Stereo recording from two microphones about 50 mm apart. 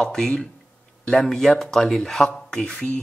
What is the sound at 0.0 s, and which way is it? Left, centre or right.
Speech, centre.